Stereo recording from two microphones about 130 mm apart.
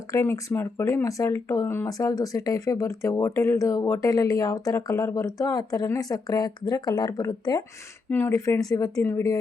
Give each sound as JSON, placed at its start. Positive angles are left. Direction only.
{"t": 0.1, "sound": "speech", "side_deg": 20}
{"t": 8.1, "sound": "speech", "side_deg": 20}